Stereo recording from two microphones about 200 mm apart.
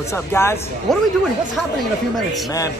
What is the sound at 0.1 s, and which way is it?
Speech, 10° left (ahead or behind).